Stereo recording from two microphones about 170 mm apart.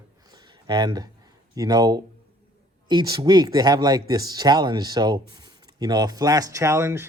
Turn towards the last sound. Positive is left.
turn(degrees=-15)  # may be behind; listen again after turning